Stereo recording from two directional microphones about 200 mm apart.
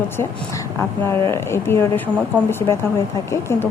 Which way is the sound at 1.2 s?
15° left (ahead or behind).